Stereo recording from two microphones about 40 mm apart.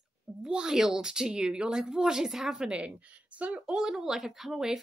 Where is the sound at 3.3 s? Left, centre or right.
Right.